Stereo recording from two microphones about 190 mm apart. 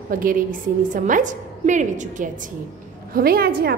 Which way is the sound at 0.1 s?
45° right (ahead or behind).